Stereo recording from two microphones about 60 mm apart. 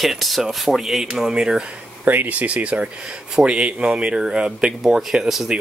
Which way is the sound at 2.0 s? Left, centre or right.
Right.